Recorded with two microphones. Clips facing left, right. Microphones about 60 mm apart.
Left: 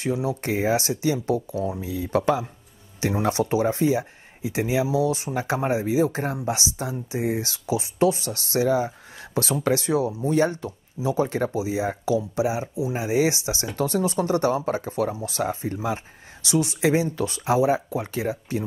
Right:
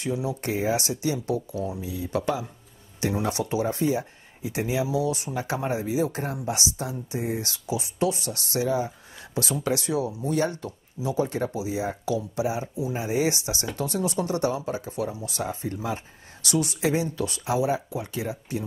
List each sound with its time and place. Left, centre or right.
0.0 s speech: left